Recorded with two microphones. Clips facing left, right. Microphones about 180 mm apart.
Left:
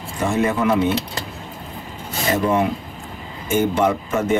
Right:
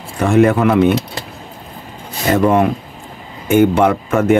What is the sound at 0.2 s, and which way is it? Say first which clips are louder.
Speech: right 8 dB; 65° right (ahead or behind).